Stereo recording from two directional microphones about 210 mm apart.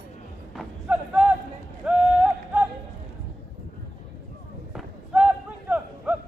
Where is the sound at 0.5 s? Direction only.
5° right (ahead or behind).